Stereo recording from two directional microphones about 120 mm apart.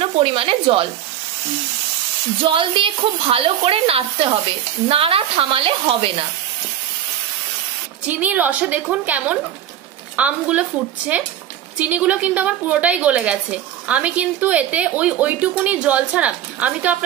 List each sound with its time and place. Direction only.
0.0 s a woman's voice: 50° right (ahead or behind)
2.5 s a woman's voice: 45° right (ahead or behind)
8.1 s a woman's voice: 15° right (ahead or behind)
11.8 s a woman's voice: 10° right (ahead or behind)